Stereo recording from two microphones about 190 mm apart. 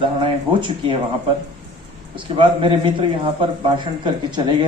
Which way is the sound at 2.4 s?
25° right (ahead or behind).